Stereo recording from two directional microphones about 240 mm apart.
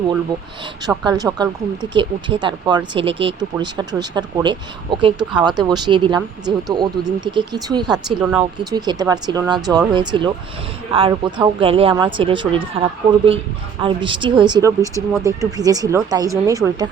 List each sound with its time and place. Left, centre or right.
0.9 s speech: centre
8.2 s speech: centre
8.7 s speech: centre